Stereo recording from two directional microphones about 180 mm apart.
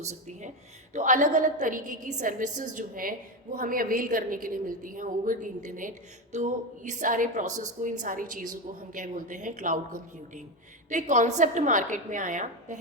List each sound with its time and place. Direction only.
0.0 s a woman's voice: 40° right (ahead or behind)